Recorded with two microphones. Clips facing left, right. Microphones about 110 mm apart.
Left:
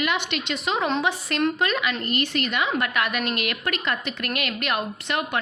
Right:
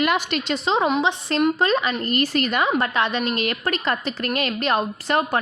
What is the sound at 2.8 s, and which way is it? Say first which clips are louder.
A woman's voice: right 3 dB; 30° right (ahead or behind).